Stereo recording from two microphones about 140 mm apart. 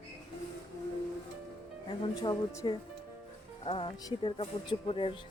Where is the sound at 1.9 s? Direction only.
35° left (ahead or behind).